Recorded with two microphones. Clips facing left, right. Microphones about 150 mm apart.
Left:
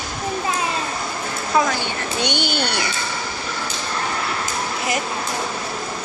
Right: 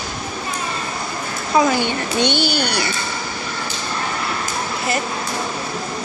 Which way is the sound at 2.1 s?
15° left (ahead or behind).